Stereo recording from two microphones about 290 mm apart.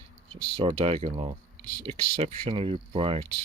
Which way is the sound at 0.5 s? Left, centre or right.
Centre.